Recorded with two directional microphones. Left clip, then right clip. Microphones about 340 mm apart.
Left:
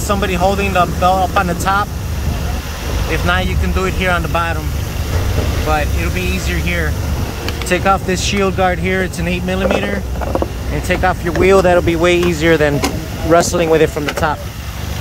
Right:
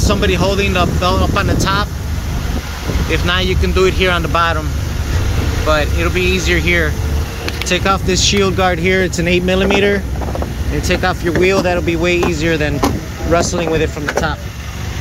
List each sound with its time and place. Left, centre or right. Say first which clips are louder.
0.1 s speech: left 1 dB; centre
3.1 s speech: right 1 dB; centre
5.7 s speech: right 4 dB; centre
11.5 s speech: left 4 dB; centre